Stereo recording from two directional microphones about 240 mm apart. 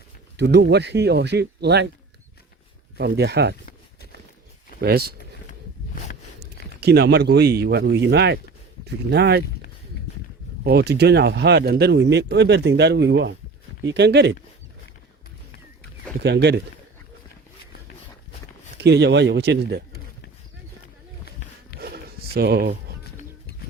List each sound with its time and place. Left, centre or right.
0.3 s speech: right
3.0 s speech: right
4.8 s speech: right
6.4 s speech: right
10.6 s speech: right
16.2 s speech: right
18.8 s speech: right
21.8 s a sound: right